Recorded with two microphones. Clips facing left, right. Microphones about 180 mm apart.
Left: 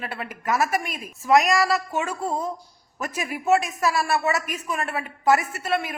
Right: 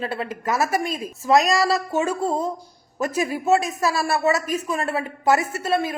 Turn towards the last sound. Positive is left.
turn(degrees=-30)  # may be behind; listen again after turning